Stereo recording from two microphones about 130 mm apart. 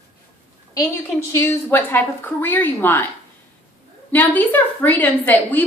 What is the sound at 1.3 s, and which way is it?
A woman's voice, 15° left (ahead or behind).